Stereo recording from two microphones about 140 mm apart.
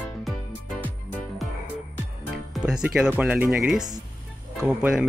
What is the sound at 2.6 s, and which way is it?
Speech, 5° right (ahead or behind).